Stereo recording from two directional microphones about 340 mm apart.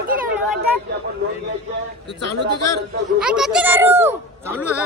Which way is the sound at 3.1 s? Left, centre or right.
Centre.